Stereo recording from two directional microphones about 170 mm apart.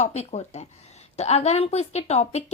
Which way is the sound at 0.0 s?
40° left (ahead or behind).